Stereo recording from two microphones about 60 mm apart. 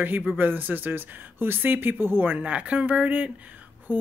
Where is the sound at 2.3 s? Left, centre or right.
Centre.